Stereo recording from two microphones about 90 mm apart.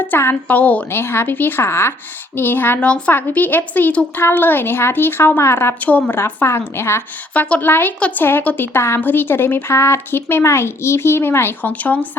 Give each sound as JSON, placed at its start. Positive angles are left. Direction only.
{"t": 0.1, "sound": "speech", "side_deg": 25}
{"t": 5.8, "sound": "speech", "side_deg": 15}
{"t": 6.1, "sound": "speech", "side_deg": 30}
{"t": 7.3, "sound": "speech", "side_deg": 20}
{"t": 8.2, "sound": "speech", "side_deg": 25}